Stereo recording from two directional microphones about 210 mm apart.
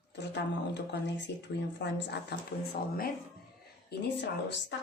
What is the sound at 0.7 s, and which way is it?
A woman's voice, 55° left (ahead or behind).